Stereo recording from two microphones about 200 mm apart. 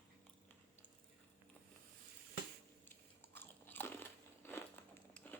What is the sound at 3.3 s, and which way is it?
Biting, 10° left (ahead or behind).